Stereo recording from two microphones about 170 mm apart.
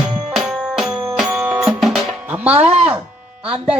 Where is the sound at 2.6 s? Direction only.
40° right (ahead or behind).